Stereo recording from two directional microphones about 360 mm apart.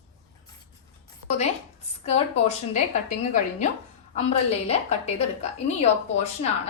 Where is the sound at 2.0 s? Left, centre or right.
Centre.